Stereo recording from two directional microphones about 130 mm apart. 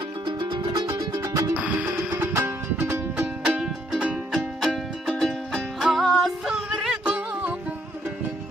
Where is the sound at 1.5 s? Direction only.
10° right (ahead or behind).